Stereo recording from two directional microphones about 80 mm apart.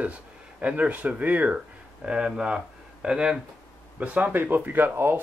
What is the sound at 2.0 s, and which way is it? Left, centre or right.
Speech, centre.